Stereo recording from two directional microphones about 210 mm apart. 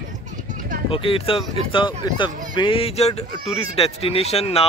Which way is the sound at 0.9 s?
25° left (ahead or behind).